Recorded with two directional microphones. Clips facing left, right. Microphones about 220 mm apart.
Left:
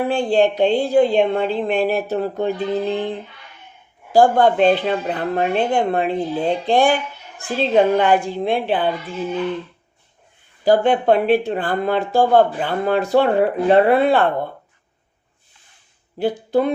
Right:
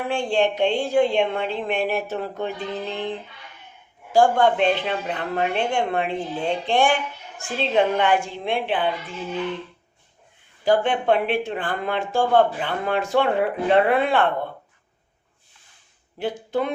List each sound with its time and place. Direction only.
0.1 s speech: 35° left (ahead or behind)
4.1 s speech: 35° left (ahead or behind)
10.7 s speech: 40° left (ahead or behind)
16.1 s speech: 35° left (ahead or behind)